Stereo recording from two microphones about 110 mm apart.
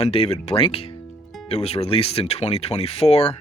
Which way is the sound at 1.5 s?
70° left (ahead or behind).